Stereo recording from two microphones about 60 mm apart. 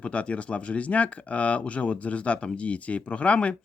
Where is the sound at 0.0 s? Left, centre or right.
Centre.